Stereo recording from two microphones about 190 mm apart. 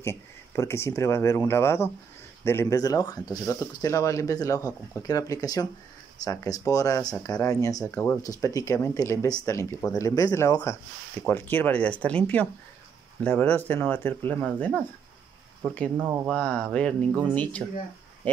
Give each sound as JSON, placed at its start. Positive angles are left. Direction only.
{"t": 0.0, "sound": "speech", "side_deg": 15}
{"t": 15.6, "sound": "speech", "side_deg": 5}